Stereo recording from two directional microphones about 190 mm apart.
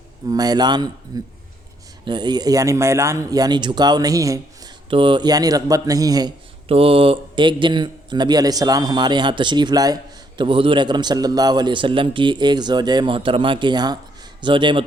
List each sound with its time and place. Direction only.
0.3 s speech: 20° right (ahead or behind)